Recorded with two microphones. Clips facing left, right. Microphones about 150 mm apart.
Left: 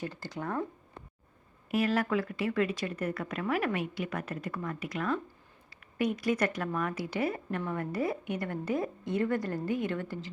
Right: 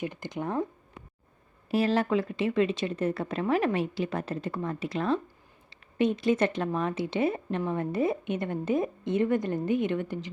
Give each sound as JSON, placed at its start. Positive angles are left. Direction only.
{"t": 0.0, "sound": "a woman's voice", "side_deg": -20}
{"t": 1.7, "sound": "a woman's voice", "side_deg": -30}